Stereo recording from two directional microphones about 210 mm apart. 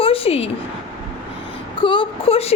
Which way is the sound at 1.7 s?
25° left (ahead or behind).